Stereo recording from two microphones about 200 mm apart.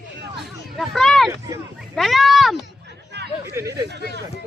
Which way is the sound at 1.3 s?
15° right (ahead or behind).